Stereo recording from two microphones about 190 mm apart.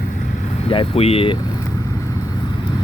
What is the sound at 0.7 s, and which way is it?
Speech, 30° left (ahead or behind).